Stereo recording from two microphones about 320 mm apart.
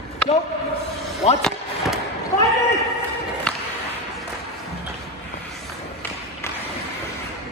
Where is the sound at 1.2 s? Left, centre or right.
Centre.